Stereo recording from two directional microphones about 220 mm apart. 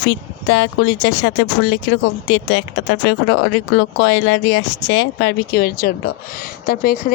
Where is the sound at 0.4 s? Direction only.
60° left (ahead or behind).